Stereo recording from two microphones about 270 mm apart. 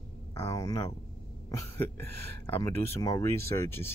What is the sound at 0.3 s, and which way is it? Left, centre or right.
Speech, centre.